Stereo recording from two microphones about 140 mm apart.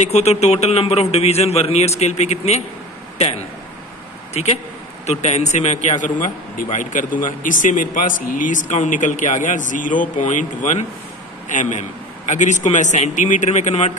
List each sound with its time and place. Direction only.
0.0 s a man's voice: 50° left (ahead or behind)
4.3 s a man's voice: 50° left (ahead or behind)